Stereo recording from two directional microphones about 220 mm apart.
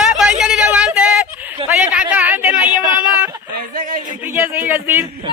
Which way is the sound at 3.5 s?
35° right (ahead or behind).